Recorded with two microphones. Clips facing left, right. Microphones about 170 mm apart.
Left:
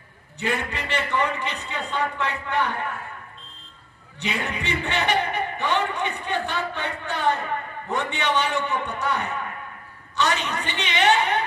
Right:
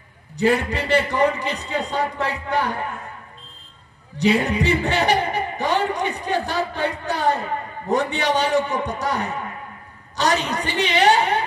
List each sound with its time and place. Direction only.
0.4 s a man's voice: 35° right (ahead or behind)
4.2 s a man's voice: 35° right (ahead or behind)